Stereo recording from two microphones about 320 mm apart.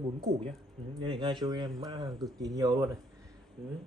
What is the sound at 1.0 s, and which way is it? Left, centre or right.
Speech, centre.